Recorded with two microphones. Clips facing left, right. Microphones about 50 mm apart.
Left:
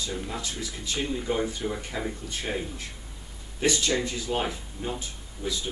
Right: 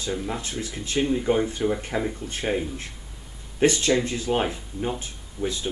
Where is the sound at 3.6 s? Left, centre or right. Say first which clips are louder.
Right 5 dB; right.